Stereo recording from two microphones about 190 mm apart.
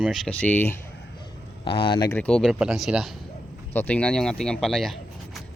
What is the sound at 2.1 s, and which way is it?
Speech, 5° left (ahead or behind).